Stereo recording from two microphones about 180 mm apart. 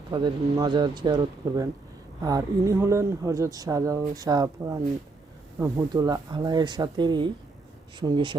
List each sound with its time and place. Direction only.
0.1 s speech: 25° right (ahead or behind)